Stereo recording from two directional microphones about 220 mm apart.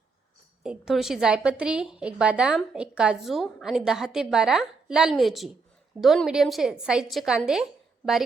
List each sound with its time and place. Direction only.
0.6 s a woman's voice: centre (ahead or behind)